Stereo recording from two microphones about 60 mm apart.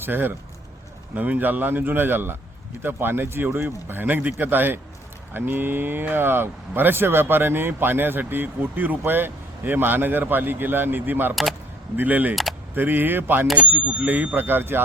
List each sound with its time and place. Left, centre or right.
0.0 s speech: right